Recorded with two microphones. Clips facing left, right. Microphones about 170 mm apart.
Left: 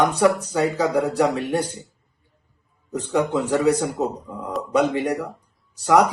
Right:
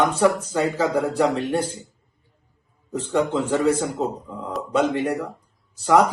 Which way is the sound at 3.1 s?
10° left (ahead or behind).